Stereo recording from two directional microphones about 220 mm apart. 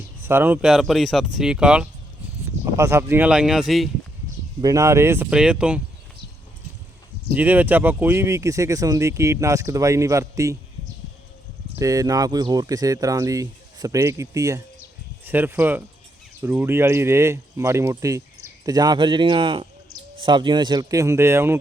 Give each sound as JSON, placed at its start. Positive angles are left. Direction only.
{"t": 0.2, "sound": "speech", "side_deg": -10}
{"t": 4.6, "sound": "speech", "side_deg": -15}
{"t": 7.3, "sound": "speech", "side_deg": -5}
{"t": 11.8, "sound": "speech", "side_deg": -15}